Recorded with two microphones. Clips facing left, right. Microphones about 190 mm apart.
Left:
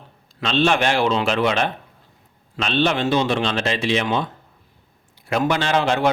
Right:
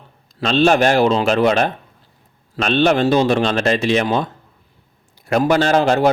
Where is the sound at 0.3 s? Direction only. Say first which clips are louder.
Right 5 dB; 40° right (ahead or behind).